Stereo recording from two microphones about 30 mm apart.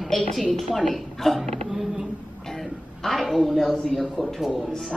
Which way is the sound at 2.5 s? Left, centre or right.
Centre.